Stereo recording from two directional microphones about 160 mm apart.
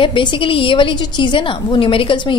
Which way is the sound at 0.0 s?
30° left (ahead or behind).